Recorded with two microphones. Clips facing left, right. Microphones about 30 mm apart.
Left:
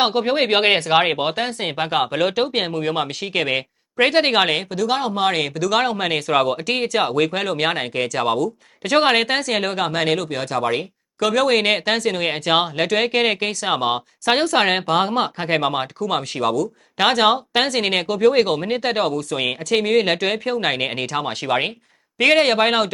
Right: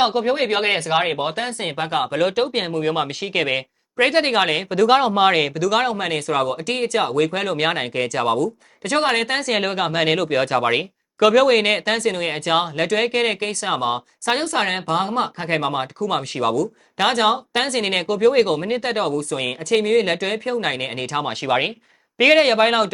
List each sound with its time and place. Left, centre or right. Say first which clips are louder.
0.1 s speech: left 1 dB; left
4.7 s speech: right 5 dB; right
5.2 s speech: right 3 dB; centre
6.0 s speech: left 2 dB; centre
7.3 s speech: even; centre
9.4 s speech: even; centre
11.4 s speech: right 1 dB; centre; by 15.3 s left
15.4 s speech: left 2 dB; centre
16.0 s speech: even; centre
17.0 s speech: left 2 dB; centre
21.1 s speech: right 4 dB; centre